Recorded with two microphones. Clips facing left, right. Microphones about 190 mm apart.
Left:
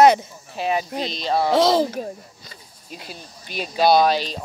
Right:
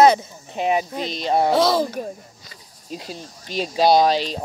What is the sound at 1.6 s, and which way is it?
Speech, 15° left (ahead or behind).